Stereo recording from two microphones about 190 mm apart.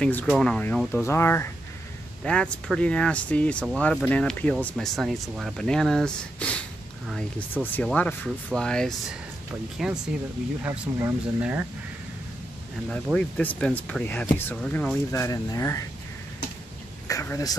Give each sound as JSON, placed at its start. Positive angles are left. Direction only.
{"t": 0.0, "sound": "speech", "side_deg": 5}
{"t": 12.9, "sound": "speech", "side_deg": 5}
{"t": 15.2, "sound": "speech", "side_deg": 20}
{"t": 17.1, "sound": "speech", "side_deg": 15}